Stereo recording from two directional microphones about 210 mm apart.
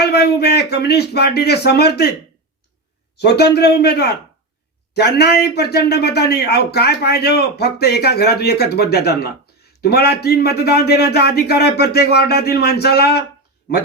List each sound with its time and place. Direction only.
0.0 s a man's voice: 50° left (ahead or behind)
3.2 s a man's voice: 50° left (ahead or behind)